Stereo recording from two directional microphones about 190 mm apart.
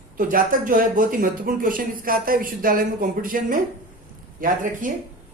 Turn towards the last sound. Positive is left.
turn(degrees=-45)  # may be behind; listen again after turning